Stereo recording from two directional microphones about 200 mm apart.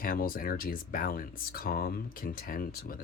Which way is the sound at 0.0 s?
45° left (ahead or behind).